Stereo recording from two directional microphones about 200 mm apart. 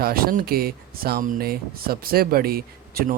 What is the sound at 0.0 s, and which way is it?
Speech, 50° right (ahead or behind).